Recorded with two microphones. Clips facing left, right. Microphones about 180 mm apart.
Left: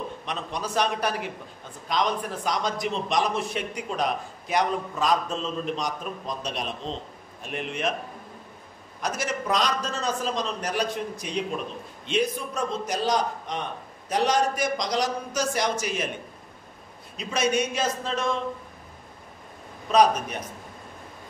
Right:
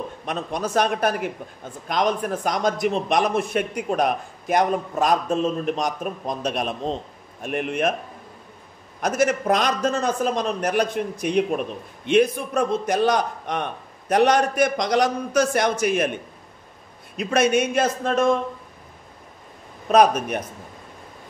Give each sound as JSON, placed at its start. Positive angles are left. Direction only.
{"t": 0.2, "sound": "a man's voice", "side_deg": -50}
{"t": 9.0, "sound": "a man's voice", "side_deg": -50}
{"t": 17.2, "sound": "a man's voice", "side_deg": -55}
{"t": 19.9, "sound": "a man's voice", "side_deg": -55}